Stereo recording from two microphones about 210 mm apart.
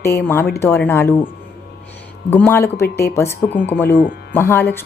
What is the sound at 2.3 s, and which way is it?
A woman's voice, 10° left (ahead or behind).